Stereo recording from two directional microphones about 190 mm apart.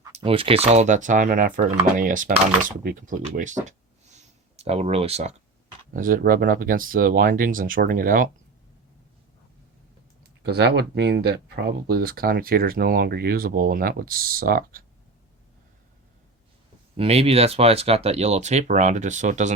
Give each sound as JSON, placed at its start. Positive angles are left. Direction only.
{"t": 0.2, "sound": "speech", "side_deg": -30}
{"t": 5.9, "sound": "speech", "side_deg": -45}
{"t": 10.4, "sound": "speech", "side_deg": -60}
{"t": 17.0, "sound": "speech", "side_deg": -30}